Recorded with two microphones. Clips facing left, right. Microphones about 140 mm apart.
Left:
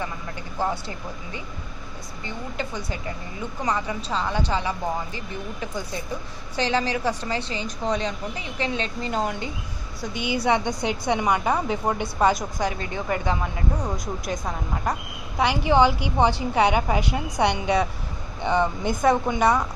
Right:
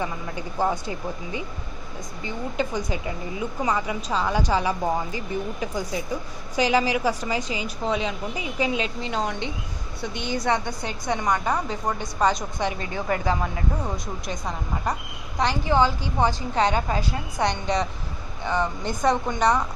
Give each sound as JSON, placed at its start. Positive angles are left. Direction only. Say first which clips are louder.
{"t": 0.6, "sound": "a woman's voice", "louder": "right 2 dB", "side_deg": -15}
{"t": 2.5, "sound": "a woman's voice", "louder": "right 5 dB", "side_deg": -15}
{"t": 6.5, "sound": "a woman's voice", "louder": "right 3 dB", "side_deg": -10}
{"t": 9.0, "sound": "a woman's voice", "louder": "left 1 dB", "side_deg": 5}
{"t": 13.8, "sound": "a woman's voice", "louder": "left 2 dB", "side_deg": 0}
{"t": 15.4, "sound": "a woman's voice", "louder": "left 2 dB", "side_deg": 15}